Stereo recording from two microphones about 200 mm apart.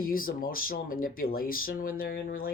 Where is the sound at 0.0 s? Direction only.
45° left (ahead or behind).